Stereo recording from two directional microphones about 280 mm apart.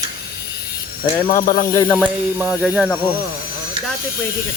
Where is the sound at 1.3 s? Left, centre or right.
Left.